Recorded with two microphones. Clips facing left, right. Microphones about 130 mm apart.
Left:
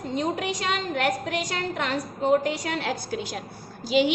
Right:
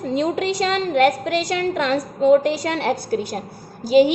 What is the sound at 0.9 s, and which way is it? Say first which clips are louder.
A woman's voice: right 11 dB; 70° right (ahead or behind).